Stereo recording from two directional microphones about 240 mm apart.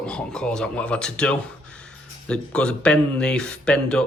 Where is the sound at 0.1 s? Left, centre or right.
Centre.